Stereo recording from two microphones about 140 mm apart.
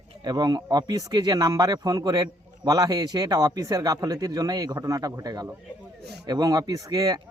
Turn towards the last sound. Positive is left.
turn(degrees=-25)  # may be behind; listen again after turning